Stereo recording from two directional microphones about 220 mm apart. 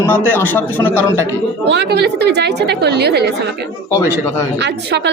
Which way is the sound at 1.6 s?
50° right (ahead or behind).